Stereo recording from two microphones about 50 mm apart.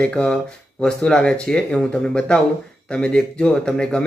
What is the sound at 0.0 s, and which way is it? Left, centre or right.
Speech, centre.